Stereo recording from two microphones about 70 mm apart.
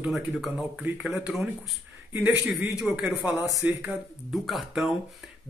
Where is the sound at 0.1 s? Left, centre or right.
Centre.